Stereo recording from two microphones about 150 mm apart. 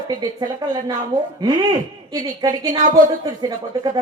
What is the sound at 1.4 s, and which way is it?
A woman's voice, 30° right (ahead or behind).